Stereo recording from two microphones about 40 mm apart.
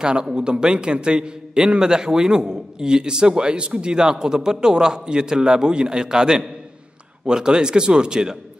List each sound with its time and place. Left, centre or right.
0.0 s a man's voice: centre